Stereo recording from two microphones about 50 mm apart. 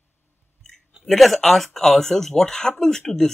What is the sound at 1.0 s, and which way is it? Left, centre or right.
Speech, centre.